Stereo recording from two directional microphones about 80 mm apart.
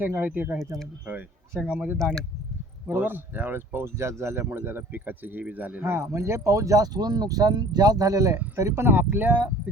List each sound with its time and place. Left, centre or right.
0.0 s speech: right
2.8 s speech: right
5.8 s speech: right
8.5 s speech: right